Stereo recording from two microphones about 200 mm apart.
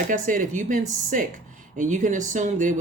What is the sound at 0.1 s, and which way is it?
Speech, 40° right (ahead or behind).